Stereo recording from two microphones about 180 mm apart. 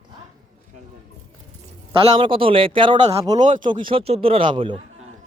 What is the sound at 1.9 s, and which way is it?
A man's voice, 30° right (ahead or behind).